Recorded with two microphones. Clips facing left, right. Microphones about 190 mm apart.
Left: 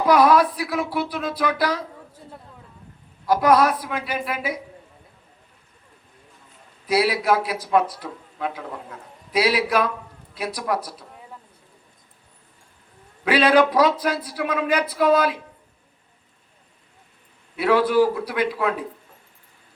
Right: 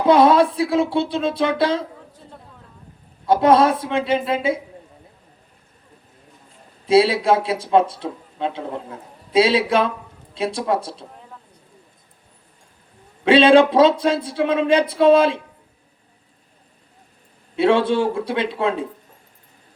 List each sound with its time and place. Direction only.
0.0 s a man's voice: 25° right (ahead or behind)
3.2 s a man's voice: 25° right (ahead or behind)
6.8 s a man's voice: 25° right (ahead or behind)
13.2 s a man's voice: 25° right (ahead or behind)
17.6 s a man's voice: 25° right (ahead or behind)